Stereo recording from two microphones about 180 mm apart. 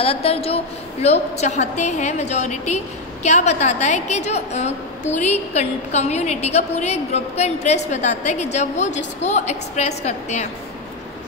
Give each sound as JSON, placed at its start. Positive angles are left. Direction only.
{"t": 0.0, "sound": "a woman's voice", "side_deg": 35}